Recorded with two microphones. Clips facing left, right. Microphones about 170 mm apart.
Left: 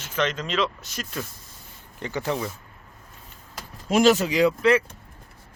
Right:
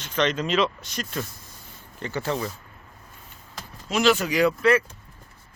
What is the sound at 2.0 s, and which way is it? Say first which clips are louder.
Speech: even; 15° left (ahead or behind).